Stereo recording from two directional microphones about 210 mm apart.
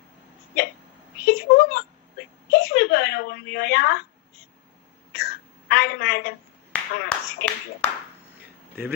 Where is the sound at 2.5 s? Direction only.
50° left (ahead or behind).